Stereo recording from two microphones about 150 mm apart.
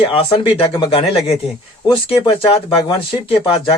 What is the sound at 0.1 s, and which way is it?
Speech, 35° left (ahead or behind).